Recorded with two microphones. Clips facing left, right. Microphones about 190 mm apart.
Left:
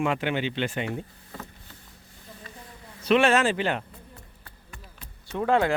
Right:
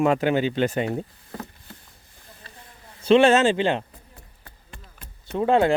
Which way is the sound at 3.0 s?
30° right (ahead or behind).